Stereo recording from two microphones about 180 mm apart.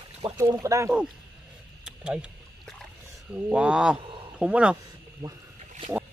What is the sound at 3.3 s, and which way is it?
Speech, 5° right (ahead or behind).